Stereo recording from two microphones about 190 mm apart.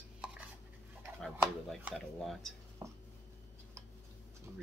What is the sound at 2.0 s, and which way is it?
Speech, 5° left (ahead or behind).